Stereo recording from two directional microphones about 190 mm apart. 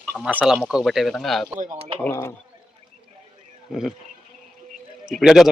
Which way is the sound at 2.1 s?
15° left (ahead or behind).